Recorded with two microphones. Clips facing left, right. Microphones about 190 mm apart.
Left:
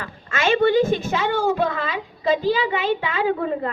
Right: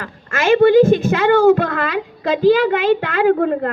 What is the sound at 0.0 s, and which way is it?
A woman's voice, 50° right (ahead or behind).